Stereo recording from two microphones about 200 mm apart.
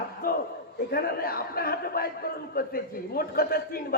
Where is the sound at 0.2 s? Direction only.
50° left (ahead or behind).